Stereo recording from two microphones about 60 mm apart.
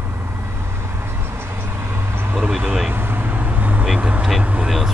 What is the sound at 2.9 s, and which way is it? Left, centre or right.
Vehicle, right.